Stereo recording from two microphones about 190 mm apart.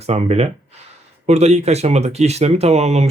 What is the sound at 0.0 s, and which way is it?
Speech, 35° right (ahead or behind).